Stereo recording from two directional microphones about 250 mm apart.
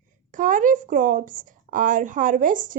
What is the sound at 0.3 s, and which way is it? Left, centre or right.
A child's voice, right.